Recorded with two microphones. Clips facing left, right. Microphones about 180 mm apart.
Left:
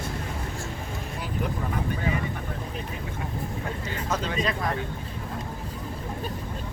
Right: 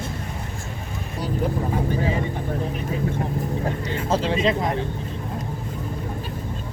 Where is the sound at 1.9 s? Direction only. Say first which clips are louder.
Right 4 dB; 30° right (ahead or behind).